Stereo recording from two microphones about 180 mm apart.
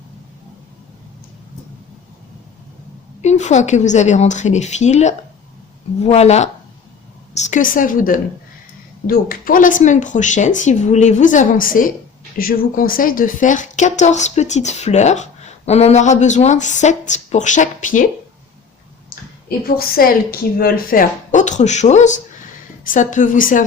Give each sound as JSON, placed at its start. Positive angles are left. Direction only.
{"t": 3.2, "sound": "speech", "side_deg": 40}
{"t": 19.5, "sound": "a woman's voice", "side_deg": 55}